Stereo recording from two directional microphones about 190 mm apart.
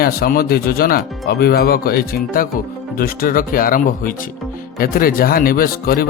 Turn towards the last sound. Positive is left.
turn(degrees=50)  # may be behind; listen again after turning